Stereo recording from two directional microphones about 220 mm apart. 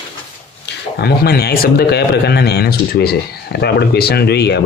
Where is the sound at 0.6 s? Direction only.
50° left (ahead or behind).